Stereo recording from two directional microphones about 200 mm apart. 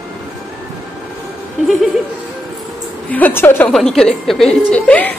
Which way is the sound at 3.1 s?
10° left (ahead or behind).